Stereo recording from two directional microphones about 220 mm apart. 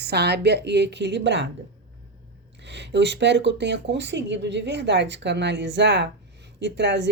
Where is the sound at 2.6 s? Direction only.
55° right (ahead or behind).